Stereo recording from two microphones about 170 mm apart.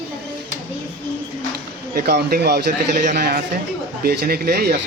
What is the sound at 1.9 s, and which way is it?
Speech, 65° right (ahead or behind).